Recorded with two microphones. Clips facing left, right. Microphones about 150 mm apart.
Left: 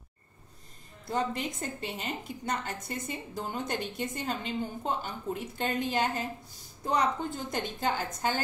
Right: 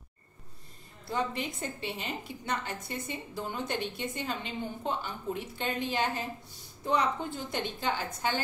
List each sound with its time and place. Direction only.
1.0 s a woman's voice: 45° left (ahead or behind)